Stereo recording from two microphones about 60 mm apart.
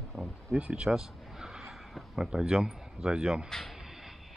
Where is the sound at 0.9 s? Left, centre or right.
Centre.